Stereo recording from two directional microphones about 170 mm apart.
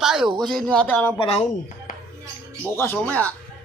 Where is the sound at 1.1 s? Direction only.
30° left (ahead or behind).